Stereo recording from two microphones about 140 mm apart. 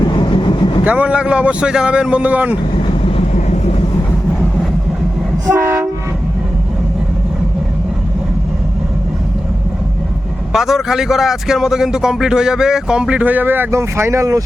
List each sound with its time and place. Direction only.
0.0 s vehicle: 35° left (ahead or behind)
0.9 s speech: 10° right (ahead or behind)
2.7 s vehicle: 40° left (ahead or behind)
3.3 s vehicle: 55° left (ahead or behind)
5.5 s train: 20° right (ahead or behind)
10.5 s speech: 5° right (ahead or behind); by 14.4 s 25° right (ahead or behind)